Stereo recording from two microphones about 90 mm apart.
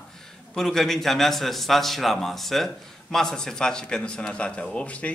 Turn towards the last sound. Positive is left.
turn(degrees=15)  # may be behind; listen again after turning